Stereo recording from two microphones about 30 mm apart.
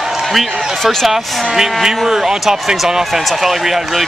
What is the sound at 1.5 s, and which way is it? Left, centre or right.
Speech, centre.